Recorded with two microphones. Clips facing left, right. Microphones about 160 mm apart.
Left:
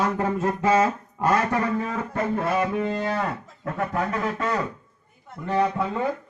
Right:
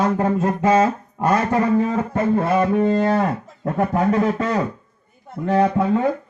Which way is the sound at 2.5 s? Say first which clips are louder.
Right 7 dB; 40° right (ahead or behind).